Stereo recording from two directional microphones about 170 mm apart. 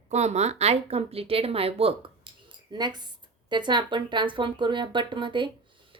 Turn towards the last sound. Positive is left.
turn(degrees=-30)  # may be behind; listen again after turning